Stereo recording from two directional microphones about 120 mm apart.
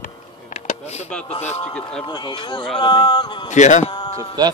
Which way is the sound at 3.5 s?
85° left.